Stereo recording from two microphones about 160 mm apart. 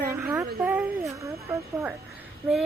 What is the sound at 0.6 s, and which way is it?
Speech, 10° right (ahead or behind).